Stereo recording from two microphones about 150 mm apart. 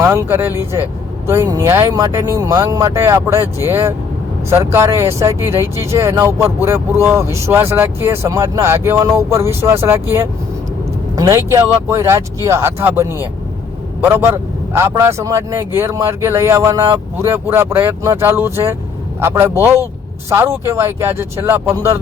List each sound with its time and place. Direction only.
0.0 s speech: 20° right (ahead or behind)